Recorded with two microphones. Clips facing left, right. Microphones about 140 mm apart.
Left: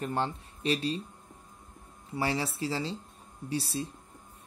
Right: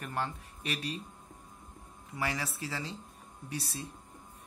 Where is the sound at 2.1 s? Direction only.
30° left (ahead or behind).